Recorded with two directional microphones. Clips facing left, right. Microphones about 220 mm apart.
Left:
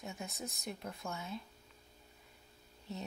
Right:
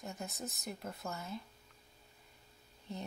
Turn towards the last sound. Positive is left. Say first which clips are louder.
# even
turn(degrees=5)  # may be behind; listen again after turning